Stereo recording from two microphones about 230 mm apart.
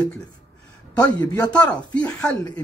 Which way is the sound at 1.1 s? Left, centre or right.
Centre.